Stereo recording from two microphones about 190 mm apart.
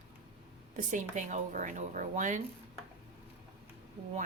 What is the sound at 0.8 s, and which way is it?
A woman's voice, 40° right (ahead or behind).